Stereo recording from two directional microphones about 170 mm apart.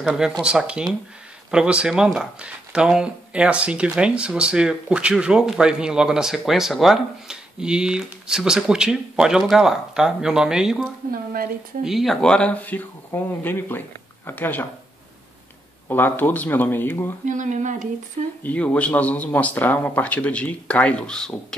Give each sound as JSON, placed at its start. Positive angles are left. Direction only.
{"t": 0.0, "sound": "speech", "side_deg": -5}
{"t": 11.1, "sound": "speech", "side_deg": -60}
{"t": 11.8, "sound": "speech", "side_deg": 0}
{"t": 15.9, "sound": "speech", "side_deg": 10}
{"t": 17.2, "sound": "speech", "side_deg": -50}
{"t": 18.4, "sound": "speech", "side_deg": 10}